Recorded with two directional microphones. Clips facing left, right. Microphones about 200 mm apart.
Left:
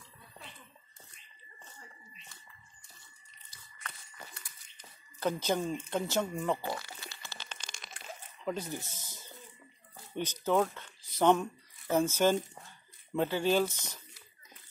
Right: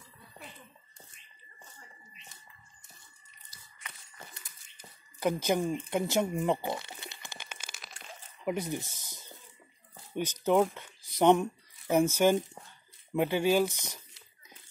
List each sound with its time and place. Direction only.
4.7 s a sound: 15° right (ahead or behind)
5.9 s crunch: 15° right (ahead or behind)
8.5 s speech: 15° right (ahead or behind)